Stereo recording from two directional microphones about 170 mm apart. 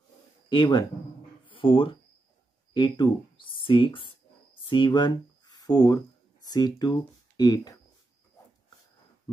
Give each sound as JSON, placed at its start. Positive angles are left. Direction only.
{"t": 0.5, "sound": "speech", "side_deg": 25}